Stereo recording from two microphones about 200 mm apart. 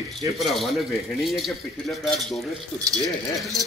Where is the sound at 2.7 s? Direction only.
20° right (ahead or behind).